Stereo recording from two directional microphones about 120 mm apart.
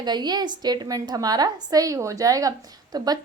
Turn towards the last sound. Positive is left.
turn(degrees=-35)  # may be behind; listen again after turning